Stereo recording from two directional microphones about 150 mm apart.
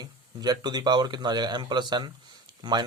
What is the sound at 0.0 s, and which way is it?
A man's voice, 25° right (ahead or behind).